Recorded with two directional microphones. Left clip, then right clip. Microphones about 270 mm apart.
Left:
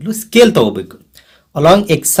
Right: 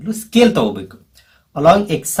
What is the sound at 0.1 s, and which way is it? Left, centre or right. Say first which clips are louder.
Speech: left 5 dB; left.